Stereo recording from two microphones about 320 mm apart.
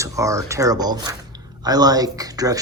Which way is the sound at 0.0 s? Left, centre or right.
Centre.